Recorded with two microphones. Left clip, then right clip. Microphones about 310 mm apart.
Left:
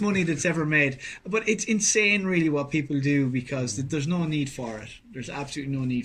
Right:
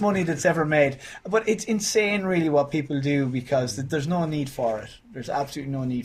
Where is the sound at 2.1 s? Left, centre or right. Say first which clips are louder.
Right 1 dB; right.